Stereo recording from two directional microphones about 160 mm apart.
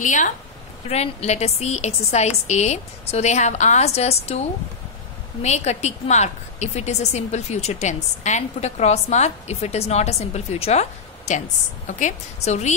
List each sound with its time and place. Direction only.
0.0 s a woman's voice: 50° left (ahead or behind)
0.8 s a woman's voice: 40° left (ahead or behind)